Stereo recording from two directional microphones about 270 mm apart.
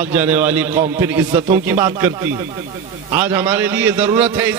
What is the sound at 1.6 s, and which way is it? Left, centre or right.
A man's voice, centre.